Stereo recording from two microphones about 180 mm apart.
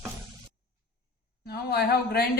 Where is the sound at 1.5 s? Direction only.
60° left (ahead or behind).